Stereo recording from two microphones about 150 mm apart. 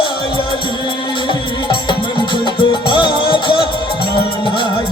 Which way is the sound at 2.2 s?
30° left (ahead or behind).